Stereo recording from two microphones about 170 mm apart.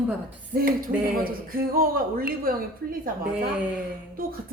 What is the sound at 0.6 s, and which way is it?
Speech, 60° right (ahead or behind).